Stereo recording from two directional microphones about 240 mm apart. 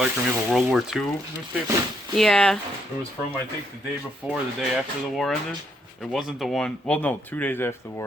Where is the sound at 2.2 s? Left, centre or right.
Centre.